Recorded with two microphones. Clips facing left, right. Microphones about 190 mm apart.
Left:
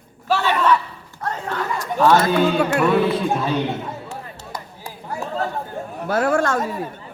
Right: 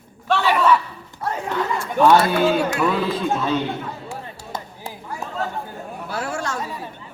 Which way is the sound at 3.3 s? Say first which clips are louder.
Even; 10° left (ahead or behind).